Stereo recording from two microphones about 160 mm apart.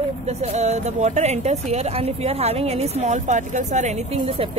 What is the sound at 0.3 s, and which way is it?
Speech, 45° right (ahead or behind).